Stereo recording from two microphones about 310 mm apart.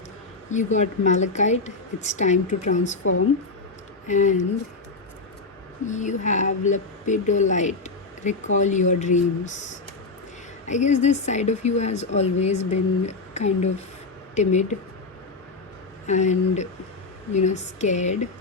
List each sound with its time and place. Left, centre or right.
0.5 s speech: left
3.0 s speech: left
4.0 s speech: left
5.8 s speech: left
10.7 s speech: left
16.0 s speech: left